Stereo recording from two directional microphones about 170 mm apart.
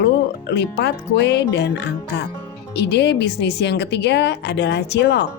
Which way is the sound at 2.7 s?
80° left.